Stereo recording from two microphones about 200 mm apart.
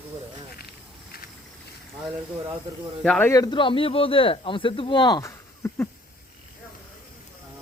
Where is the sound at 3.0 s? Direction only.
10° left (ahead or behind).